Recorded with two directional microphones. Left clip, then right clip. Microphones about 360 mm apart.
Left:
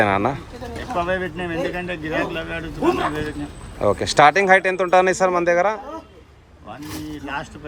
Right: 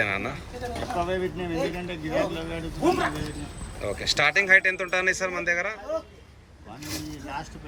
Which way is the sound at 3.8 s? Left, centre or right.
Centre.